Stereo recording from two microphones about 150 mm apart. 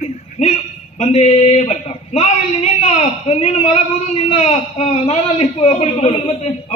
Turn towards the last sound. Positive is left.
turn(degrees=45)  # may be behind; listen again after turning